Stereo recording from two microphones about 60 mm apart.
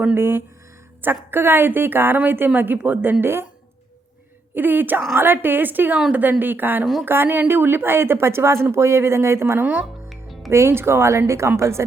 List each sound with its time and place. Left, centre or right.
0.1 s a woman's voice: right
4.5 s a woman's voice: right
9.6 s a woman's voice: right
9.8 s music: centre
10.5 s speech: right